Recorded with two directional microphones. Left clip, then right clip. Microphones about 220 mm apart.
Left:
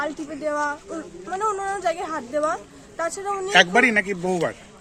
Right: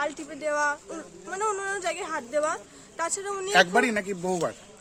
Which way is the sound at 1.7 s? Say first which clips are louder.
Left 5 dB; 35° right (ahead or behind).